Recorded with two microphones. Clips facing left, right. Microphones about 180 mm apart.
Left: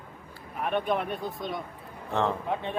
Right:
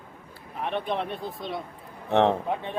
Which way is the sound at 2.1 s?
70° right (ahead or behind).